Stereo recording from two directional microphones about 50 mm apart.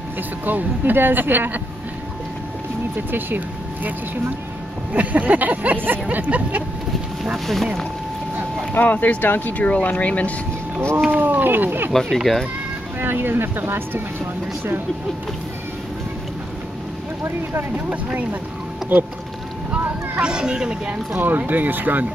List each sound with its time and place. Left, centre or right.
0.5 s speech: right
3.1 s speech: right
4.9 s speech: right
7.4 s speech: centre
8.7 s speech: left
11.1 s speech: right
11.9 s speech: centre
13.0 s speech: right
17.7 s speech: right
19.7 s speech: centre
21.1 s speech: right